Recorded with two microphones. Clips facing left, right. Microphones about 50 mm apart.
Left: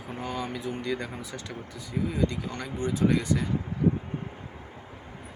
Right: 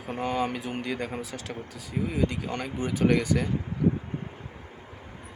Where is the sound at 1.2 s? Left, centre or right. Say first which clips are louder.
Right 2 dB; right.